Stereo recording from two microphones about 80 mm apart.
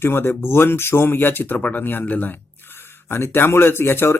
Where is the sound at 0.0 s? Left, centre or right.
Left.